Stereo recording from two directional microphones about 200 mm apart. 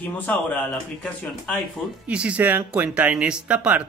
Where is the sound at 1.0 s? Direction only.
Centre (ahead or behind).